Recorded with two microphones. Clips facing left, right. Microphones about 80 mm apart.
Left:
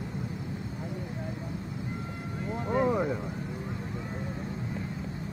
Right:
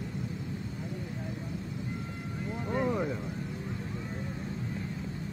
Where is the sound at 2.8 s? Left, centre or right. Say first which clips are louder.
Left 4 dB; centre.